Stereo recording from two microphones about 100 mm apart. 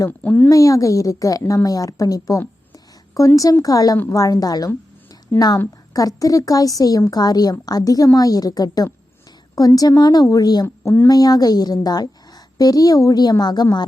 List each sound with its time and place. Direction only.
0.2 s speech: 15° left (ahead or behind)
0.5 s a woman's voice: 35° left (ahead or behind)
10.8 s speech: 25° left (ahead or behind)
11.1 s a woman's voice: 40° left (ahead or behind)